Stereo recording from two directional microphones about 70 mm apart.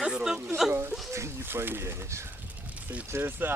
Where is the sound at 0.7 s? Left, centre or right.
Right.